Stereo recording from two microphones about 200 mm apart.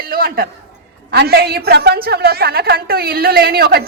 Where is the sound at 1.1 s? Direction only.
55° right (ahead or behind).